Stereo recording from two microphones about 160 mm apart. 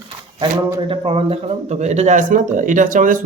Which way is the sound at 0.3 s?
35° right (ahead or behind).